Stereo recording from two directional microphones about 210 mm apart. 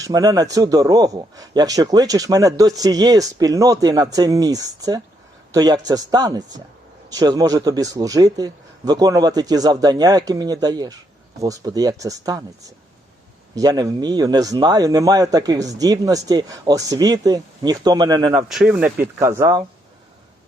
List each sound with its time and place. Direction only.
0.0 s speech: 20° right (ahead or behind)
18.3 s speech: 5° right (ahead or behind)